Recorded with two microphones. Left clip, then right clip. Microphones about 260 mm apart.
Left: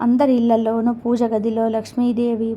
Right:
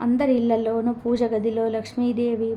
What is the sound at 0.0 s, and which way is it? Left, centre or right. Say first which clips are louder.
A woman's voice: left 4 dB; centre.